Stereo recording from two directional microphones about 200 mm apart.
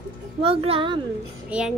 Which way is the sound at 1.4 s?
5° right (ahead or behind).